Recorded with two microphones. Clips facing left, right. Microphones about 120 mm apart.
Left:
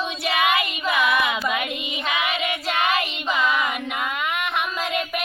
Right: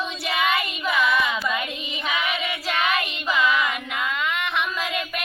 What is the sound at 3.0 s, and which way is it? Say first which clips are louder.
Child singing: even; 10° left (ahead or behind).